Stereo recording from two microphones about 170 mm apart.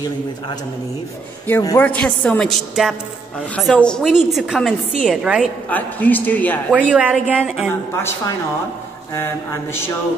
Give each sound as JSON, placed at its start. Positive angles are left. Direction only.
{"t": 1.5, "sound": "a man's voice", "side_deg": 15}
{"t": 5.7, "sound": "a man's voice", "side_deg": 10}
{"t": 6.7, "sound": "a woman's voice", "side_deg": -10}